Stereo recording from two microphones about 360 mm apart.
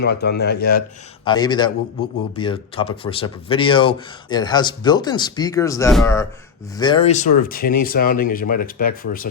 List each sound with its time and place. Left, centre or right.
0.0 s speech: left
1.2 s speech: centre